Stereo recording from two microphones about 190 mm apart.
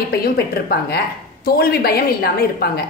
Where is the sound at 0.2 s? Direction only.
55° left (ahead or behind).